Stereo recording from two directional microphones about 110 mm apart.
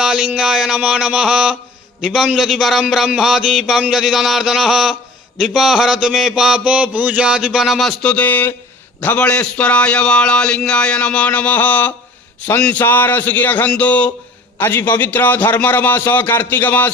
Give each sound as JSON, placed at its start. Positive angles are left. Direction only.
{"t": 0.0, "sound": "mantra", "side_deg": -5}
{"t": 2.0, "sound": "a sound", "side_deg": -5}
{"t": 8.1, "sound": "a man's voice", "side_deg": 15}